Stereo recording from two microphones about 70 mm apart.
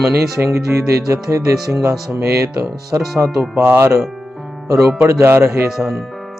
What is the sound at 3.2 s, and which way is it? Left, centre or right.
Speech, right.